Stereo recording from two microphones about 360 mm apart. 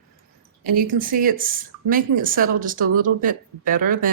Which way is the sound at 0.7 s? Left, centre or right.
Right.